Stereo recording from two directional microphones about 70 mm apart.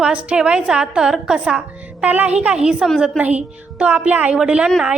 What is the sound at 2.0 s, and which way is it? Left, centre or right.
A woman's voice, right.